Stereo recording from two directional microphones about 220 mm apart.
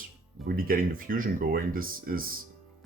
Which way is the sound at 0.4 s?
40° right (ahead or behind).